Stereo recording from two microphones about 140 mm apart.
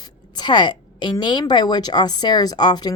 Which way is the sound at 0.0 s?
30° left (ahead or behind).